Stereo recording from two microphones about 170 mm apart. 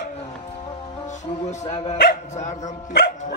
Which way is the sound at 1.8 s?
45° left (ahead or behind).